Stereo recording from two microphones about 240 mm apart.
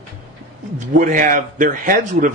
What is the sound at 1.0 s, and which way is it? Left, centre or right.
Speech, right.